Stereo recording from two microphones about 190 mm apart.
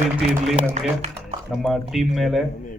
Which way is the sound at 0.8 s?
40° right (ahead or behind).